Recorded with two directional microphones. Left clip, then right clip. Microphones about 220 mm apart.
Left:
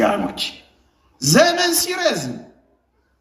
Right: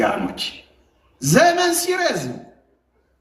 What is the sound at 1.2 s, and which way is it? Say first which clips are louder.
A woman's voice: even; 20° left (ahead or behind).